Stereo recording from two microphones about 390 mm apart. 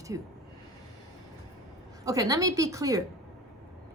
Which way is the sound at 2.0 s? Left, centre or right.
Centre.